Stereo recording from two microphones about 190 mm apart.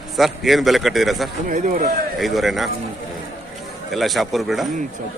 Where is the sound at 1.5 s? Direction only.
45° right (ahead or behind).